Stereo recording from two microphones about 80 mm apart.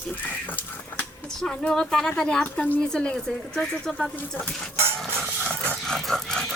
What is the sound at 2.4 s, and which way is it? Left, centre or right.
Speech, left.